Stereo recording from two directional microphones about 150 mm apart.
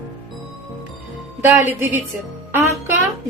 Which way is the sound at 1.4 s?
10° right (ahead or behind).